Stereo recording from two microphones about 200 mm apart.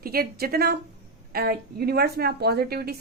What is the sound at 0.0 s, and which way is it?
A woman's voice, 50° right (ahead or behind).